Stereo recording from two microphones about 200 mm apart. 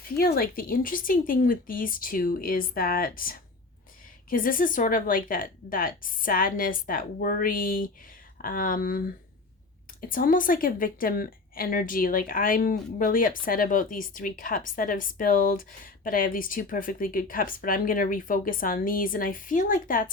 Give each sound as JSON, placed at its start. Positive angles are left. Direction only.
{"t": 0.2, "sound": "a woman's voice", "side_deg": 50}
{"t": 10.1, "sound": "a woman's voice", "side_deg": 45}